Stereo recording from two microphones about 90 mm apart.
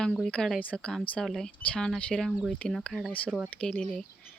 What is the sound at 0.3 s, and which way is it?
Speech, 10° left (ahead or behind).